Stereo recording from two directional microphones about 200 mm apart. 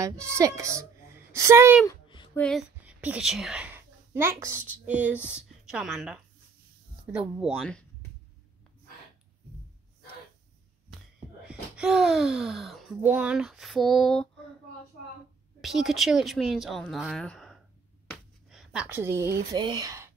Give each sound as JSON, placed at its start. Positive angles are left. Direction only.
{"t": 0.0, "sound": "a woman's voice", "side_deg": -15}
{"t": 1.9, "sound": "a sound", "side_deg": 25}
{"t": 2.3, "sound": "speech", "side_deg": 5}
{"t": 2.8, "sound": "a woman's voice", "side_deg": -5}
{"t": 11.4, "sound": "speech", "side_deg": -5}
{"t": 15.6, "sound": "speech", "side_deg": 0}